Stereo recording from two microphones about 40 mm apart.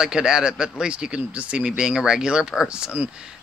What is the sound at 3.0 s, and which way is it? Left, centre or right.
Speech, right.